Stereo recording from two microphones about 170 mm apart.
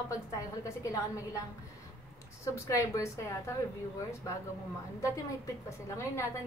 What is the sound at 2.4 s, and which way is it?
A woman's voice, 15° left (ahead or behind).